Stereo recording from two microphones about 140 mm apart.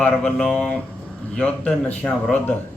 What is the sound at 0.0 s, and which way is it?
A man's voice, 5° left (ahead or behind).